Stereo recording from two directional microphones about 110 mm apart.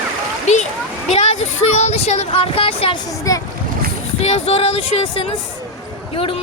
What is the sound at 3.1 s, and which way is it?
Speech, 30° left (ahead or behind).